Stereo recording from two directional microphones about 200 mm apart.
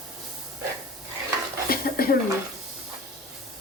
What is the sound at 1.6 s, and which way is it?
Dishes, 50° left (ahead or behind).